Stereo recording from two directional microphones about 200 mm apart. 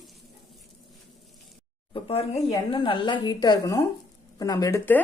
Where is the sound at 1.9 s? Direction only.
30° left (ahead or behind).